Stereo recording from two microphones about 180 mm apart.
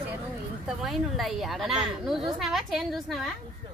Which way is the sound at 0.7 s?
Centre (ahead or behind).